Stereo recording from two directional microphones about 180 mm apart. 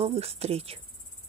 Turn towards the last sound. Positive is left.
turn(degrees=-35)  # may be behind; listen again after turning